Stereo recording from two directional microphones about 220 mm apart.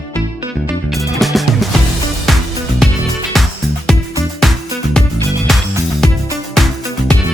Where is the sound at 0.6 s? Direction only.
Centre (ahead or behind).